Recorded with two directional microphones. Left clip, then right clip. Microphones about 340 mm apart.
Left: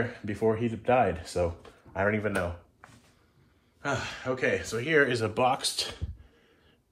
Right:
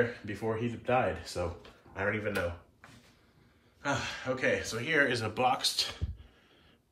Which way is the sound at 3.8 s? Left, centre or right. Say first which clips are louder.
Left 2 dB; centre.